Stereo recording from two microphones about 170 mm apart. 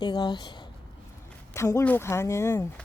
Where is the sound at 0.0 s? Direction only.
25° left (ahead or behind).